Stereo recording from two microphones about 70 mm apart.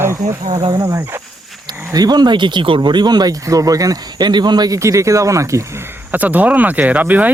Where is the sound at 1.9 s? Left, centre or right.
Right.